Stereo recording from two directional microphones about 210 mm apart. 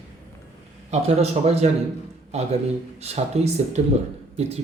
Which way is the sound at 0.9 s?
30° right (ahead or behind).